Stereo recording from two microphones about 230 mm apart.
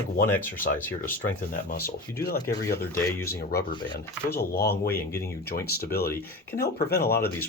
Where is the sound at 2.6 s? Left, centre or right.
Left.